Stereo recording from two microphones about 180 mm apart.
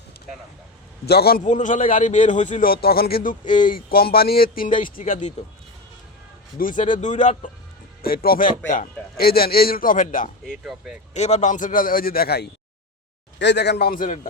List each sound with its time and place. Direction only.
1.0 s a man's voice: 60° left (ahead or behind)
1.5 s a man's voice: 45° left (ahead or behind)
6.6 s a man's voice: 45° left (ahead or behind)
8.0 s a man's voice: 55° left (ahead or behind)
10.4 s speech: 5° right (ahead or behind)
11.1 s a man's voice: 40° left (ahead or behind); by 12.5 s 60° left (ahead or behind)
13.4 s a man's voice: 70° left (ahead or behind); by 14.2 s 50° left (ahead or behind)